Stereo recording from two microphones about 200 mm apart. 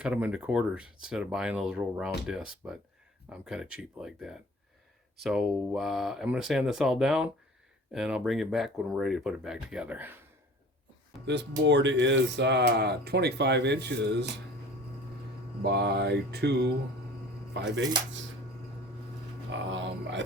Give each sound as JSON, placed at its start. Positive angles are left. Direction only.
{"t": 0.0, "sound": "speech", "side_deg": -5}
{"t": 11.3, "sound": "speech", "side_deg": -60}
{"t": 15.6, "sound": "speech", "side_deg": -55}
{"t": 19.5, "sound": "speech", "side_deg": -65}